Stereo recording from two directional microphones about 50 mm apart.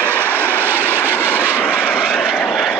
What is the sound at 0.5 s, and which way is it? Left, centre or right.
Vehicle, right.